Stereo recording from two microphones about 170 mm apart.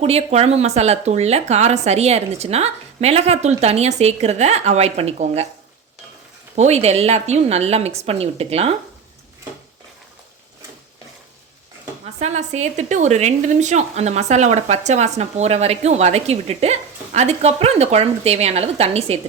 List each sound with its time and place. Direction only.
0.0 s a woman's voice: 40° right (ahead or behind)
6.6 s a woman's voice: 40° right (ahead or behind)
12.2 s a woman's voice: 40° right (ahead or behind)